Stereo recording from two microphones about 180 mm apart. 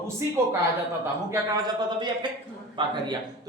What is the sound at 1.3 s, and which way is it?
Speech, 25° right (ahead or behind).